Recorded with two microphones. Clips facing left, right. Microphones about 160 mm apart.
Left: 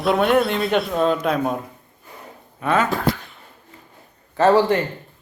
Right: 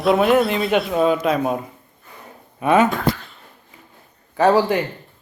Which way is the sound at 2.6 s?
15° right (ahead or behind).